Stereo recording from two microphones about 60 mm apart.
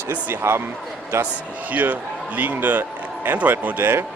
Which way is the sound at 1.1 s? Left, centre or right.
Right.